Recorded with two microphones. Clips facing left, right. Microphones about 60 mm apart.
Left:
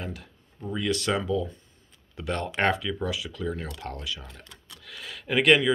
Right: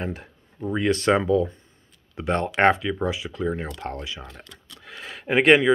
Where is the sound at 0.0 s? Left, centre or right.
Right.